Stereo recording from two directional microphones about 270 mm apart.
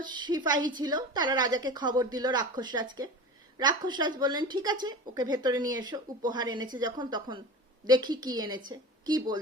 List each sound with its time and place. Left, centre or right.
0.0 s a woman's voice: centre